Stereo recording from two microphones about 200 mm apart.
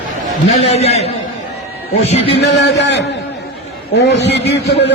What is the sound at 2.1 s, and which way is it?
A man's voice, 60° left (ahead or behind).